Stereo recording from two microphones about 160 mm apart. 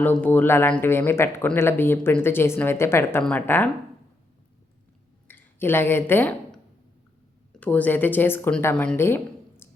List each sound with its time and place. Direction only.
0.0 s speech: 10° left (ahead or behind)
5.3 s speech: 15° left (ahead or behind)
7.6 s speech: 10° left (ahead or behind)